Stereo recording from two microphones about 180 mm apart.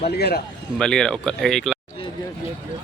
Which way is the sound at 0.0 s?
60° left (ahead or behind).